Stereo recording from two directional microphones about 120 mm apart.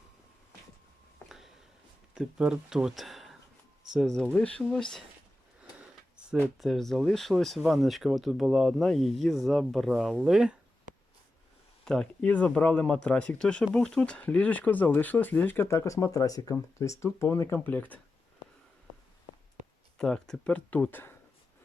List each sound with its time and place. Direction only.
1.2 s a sound: 20° left (ahead or behind)
2.1 s speech: 5° right (ahead or behind)
6.6 s speech: centre (ahead or behind)
10.9 s a sound: 90° right
11.9 s speech: 10° left (ahead or behind)
20.0 s speech: 5° left (ahead or behind)